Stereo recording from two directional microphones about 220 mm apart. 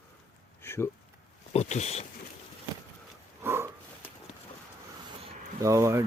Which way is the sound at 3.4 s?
10° right (ahead or behind).